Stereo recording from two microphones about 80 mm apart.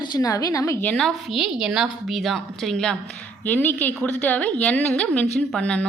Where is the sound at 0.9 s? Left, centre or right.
Centre.